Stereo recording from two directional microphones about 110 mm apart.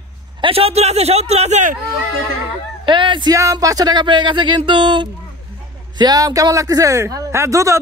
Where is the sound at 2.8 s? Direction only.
50° right (ahead or behind).